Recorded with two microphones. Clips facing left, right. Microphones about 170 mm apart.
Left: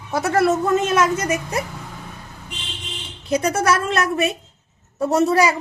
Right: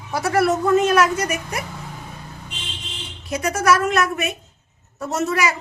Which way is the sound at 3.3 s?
30° left (ahead or behind).